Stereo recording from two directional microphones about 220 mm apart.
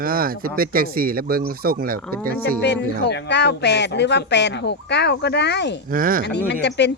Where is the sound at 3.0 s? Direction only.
50° left (ahead or behind).